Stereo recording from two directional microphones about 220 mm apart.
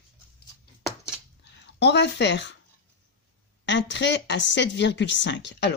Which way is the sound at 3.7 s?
55° left (ahead or behind).